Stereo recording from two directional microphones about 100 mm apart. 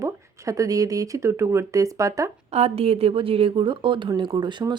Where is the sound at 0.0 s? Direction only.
35° right (ahead or behind).